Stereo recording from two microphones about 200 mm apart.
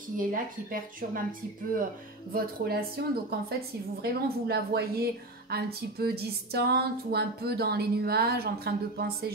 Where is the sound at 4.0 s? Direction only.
55° right (ahead or behind).